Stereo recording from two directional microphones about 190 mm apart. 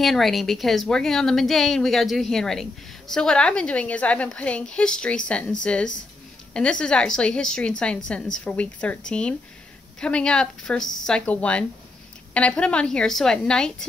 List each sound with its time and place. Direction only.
0.0 s speech: centre (ahead or behind)